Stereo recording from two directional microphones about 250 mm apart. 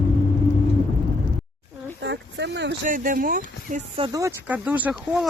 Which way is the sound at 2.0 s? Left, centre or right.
Right.